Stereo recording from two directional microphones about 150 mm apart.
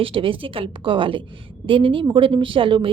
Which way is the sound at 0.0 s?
35° right (ahead or behind).